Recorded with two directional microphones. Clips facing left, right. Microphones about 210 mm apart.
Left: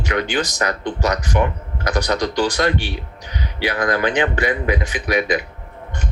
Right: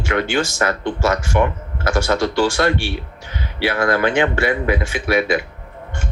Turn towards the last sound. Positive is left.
turn(degrees=20)  # may be behind; listen again after turning